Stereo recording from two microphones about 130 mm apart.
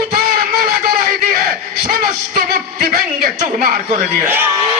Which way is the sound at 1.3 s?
90° right.